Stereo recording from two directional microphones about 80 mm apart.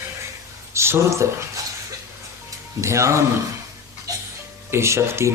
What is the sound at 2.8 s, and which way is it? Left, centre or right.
Speech, right.